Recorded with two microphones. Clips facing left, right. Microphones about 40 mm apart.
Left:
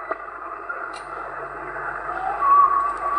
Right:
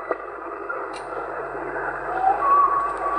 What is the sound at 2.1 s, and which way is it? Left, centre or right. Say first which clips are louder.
Emergency vehicle: left 1 dB; centre.